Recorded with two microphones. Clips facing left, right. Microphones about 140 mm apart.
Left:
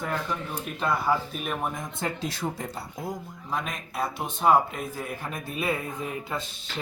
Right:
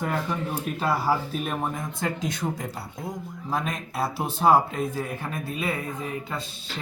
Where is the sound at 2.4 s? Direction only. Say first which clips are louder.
Right 1 dB; centre (ahead or behind).